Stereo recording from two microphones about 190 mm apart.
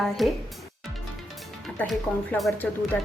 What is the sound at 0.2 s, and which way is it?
Speech, centre (ahead or behind).